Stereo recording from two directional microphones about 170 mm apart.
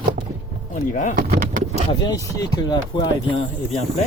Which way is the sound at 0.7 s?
50° left (ahead or behind).